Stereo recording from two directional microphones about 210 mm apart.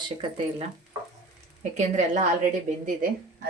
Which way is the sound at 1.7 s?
35° right (ahead or behind).